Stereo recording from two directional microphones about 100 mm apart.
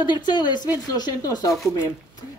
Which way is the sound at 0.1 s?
45° left (ahead or behind).